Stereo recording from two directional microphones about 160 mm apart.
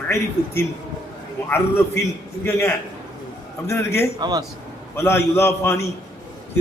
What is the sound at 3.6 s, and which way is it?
Speech, 15° left (ahead or behind).